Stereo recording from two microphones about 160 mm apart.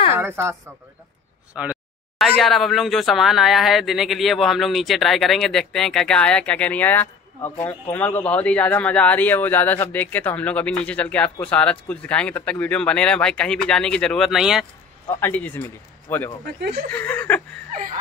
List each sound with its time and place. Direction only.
0.2 s speech: 15° right (ahead or behind)
15.1 s speech: 10° left (ahead or behind)